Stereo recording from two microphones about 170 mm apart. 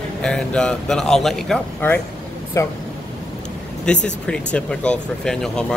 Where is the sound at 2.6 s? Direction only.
20° left (ahead or behind).